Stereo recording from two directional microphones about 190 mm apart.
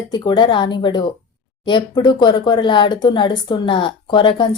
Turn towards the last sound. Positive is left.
turn(degrees=25)  # may be behind; listen again after turning